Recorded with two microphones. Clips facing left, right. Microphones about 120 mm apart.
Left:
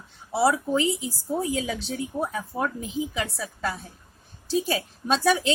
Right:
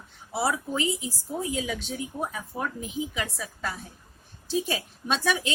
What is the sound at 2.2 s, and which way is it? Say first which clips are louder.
A woman's voice: left 3 dB; 30° left (ahead or behind).